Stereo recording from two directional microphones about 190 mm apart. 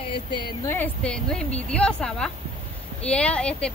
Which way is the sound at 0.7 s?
5° left (ahead or behind).